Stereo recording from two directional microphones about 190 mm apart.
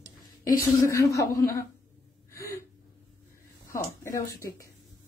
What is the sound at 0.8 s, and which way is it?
Speech, 15° left (ahead or behind).